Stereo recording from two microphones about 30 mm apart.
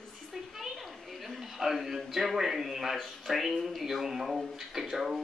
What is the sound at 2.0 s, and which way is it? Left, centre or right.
Speech, centre.